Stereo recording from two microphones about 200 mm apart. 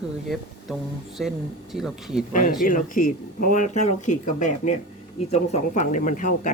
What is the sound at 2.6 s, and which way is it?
Speech, 40° left (ahead or behind).